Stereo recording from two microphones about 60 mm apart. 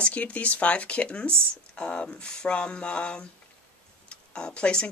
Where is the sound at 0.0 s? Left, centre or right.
Left.